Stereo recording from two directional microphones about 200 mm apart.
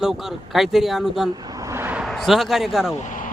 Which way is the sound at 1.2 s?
20° right (ahead or behind).